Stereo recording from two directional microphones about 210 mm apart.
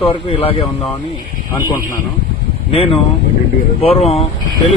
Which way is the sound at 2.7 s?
25° left (ahead or behind).